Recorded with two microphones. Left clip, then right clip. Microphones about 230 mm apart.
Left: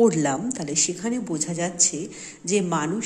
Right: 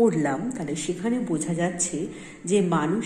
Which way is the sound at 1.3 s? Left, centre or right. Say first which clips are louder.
Even; left.